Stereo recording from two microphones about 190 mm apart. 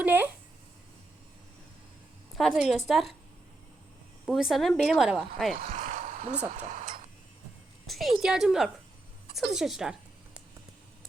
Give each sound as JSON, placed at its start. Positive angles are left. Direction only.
{"t": 0.0, "sound": "a sound", "side_deg": -10}
{"t": 2.4, "sound": "a woman's voice", "side_deg": 0}
{"t": 4.3, "sound": "a woman's voice", "side_deg": 0}
{"t": 5.5, "sound": "a sound", "side_deg": -45}
{"t": 6.5, "sound": "speech", "side_deg": -40}
{"t": 7.9, "sound": "a woman's voice", "side_deg": 0}